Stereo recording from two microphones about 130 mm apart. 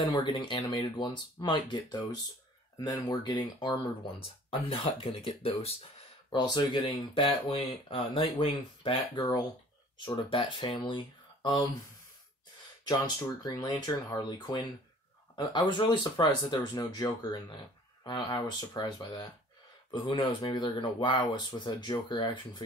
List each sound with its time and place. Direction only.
0.2 s speech: 40° left (ahead or behind)
6.3 s speech: 35° left (ahead or behind)
12.8 s speech: 35° left (ahead or behind)